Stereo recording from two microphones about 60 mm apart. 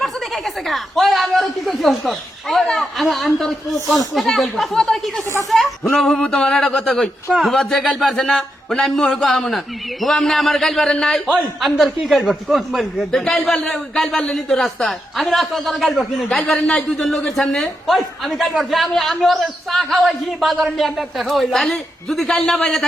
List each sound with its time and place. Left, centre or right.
0.0 s a man's voice: centre; by 6.7 s left
6.7 s a man's voice: centre
8.1 s speech: centre
11.6 s speech: centre
12.8 s a man's voice: centre
16.4 s a man's voice: centre